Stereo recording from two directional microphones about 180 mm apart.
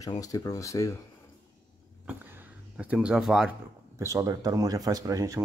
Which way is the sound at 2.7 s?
5° right (ahead or behind).